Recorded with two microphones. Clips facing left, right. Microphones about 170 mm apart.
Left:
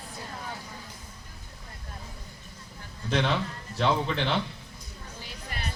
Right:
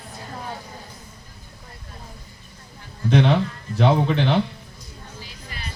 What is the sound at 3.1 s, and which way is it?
Speech, 60° right (ahead or behind).